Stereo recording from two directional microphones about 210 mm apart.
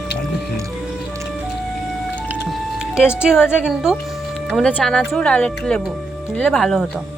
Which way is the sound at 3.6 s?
Centre (ahead or behind).